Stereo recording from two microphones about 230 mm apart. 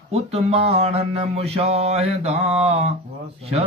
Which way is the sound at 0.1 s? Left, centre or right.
Right.